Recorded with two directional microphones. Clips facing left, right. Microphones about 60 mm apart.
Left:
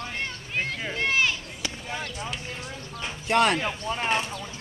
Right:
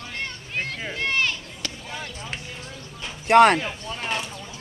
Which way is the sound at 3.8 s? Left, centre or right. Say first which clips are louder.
Left 3 dB; left.